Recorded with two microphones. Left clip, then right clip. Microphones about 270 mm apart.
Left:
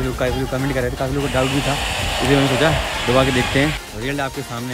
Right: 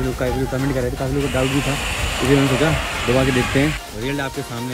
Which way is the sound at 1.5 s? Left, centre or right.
Left.